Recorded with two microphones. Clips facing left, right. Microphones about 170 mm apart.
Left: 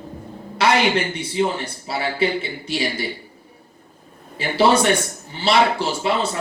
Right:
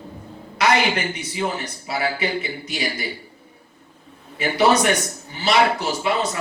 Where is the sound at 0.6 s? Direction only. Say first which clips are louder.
Left 1 dB; 30° left (ahead or behind).